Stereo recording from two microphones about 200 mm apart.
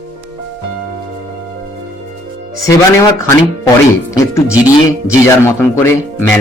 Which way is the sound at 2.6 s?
15° left (ahead or behind).